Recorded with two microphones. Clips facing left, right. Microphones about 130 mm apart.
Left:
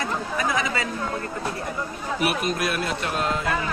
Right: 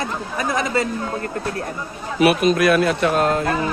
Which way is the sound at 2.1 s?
90° right.